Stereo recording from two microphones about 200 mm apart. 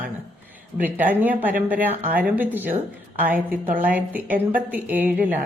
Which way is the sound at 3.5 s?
40° right (ahead or behind).